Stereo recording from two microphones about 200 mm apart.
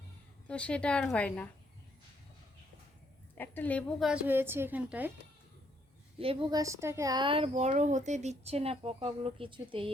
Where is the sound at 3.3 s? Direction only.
10° left (ahead or behind).